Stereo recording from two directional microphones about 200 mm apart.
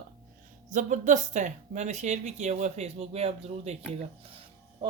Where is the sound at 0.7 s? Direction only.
40° right (ahead or behind).